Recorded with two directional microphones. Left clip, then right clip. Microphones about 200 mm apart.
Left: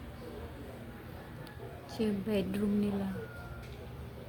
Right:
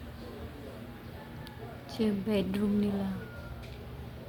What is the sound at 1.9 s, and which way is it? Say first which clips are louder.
Speech: right 2 dB; 5° right (ahead or behind).